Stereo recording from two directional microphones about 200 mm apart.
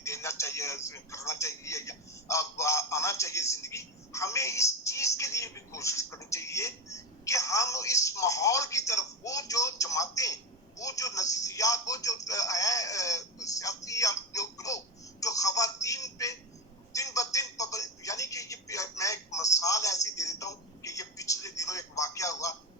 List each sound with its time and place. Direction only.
0.0 s speech: 15° left (ahead or behind)
16.9 s telephone: 15° left (ahead or behind)